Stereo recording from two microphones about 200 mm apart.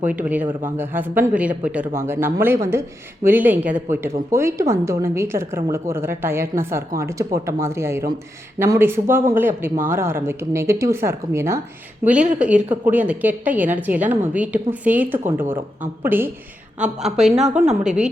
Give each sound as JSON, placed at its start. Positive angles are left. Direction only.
{"t": 0.0, "sound": "a woman's voice", "side_deg": -10}